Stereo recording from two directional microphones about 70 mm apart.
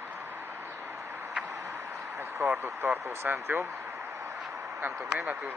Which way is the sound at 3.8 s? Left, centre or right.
Right.